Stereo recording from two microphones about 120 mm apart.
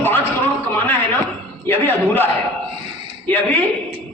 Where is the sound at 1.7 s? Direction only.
15° left (ahead or behind).